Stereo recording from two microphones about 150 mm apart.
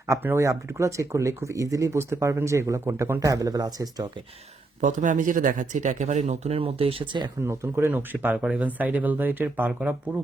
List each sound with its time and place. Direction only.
0.1 s speech: 15° right (ahead or behind)
4.8 s speech: 55° right (ahead or behind); by 7.3 s 30° right (ahead or behind)
7.4 s speech: 20° right (ahead or behind)